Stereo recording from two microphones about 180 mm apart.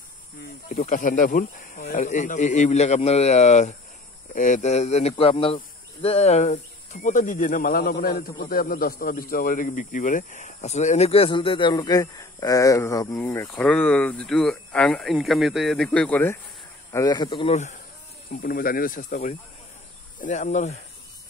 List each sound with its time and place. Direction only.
0.4 s speech: 45° left (ahead or behind); by 16.3 s 10° left (ahead or behind)
16.9 s speech: 20° left (ahead or behind)
18.3 s speech: 50° left (ahead or behind)